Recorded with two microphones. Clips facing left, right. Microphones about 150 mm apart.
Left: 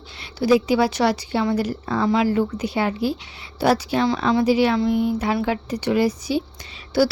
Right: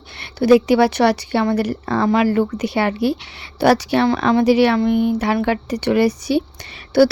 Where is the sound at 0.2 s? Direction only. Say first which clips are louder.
Right 5 dB; 65° right (ahead or behind).